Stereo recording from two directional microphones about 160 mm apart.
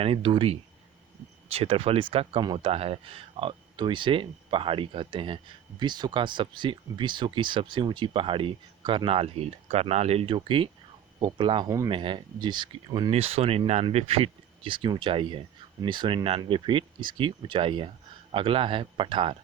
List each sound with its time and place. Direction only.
0.0 s speech: 35° right (ahead or behind)